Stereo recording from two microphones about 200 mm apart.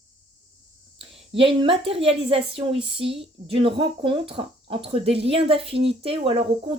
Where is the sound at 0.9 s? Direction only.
25° right (ahead or behind).